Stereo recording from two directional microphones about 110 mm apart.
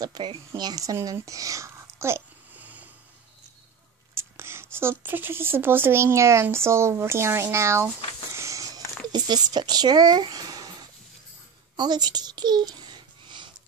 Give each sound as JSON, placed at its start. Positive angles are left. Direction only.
{"t": 0.0, "sound": "speech", "side_deg": -40}
{"t": 4.1, "sound": "speech", "side_deg": -25}
{"t": 8.4, "sound": "a sound", "side_deg": -30}
{"t": 9.1, "sound": "speech", "side_deg": -40}
{"t": 11.7, "sound": "babbling", "side_deg": -40}